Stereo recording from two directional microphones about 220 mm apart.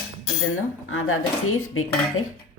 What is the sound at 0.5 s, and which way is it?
Speech, 70° left (ahead or behind).